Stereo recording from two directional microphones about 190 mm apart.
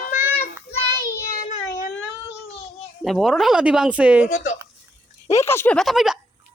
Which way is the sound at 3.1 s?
Centre (ahead or behind).